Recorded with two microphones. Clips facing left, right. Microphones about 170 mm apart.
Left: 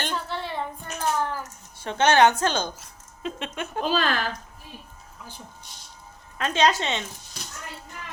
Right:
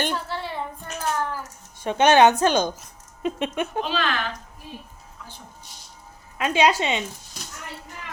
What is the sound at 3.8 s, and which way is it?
Speech, 40° left (ahead or behind).